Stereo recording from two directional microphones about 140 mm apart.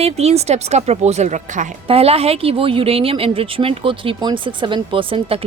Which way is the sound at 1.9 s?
45° right (ahead or behind).